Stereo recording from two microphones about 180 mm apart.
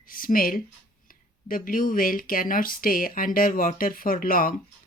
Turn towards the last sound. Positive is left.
turn(degrees=50)  # may be behind; listen again after turning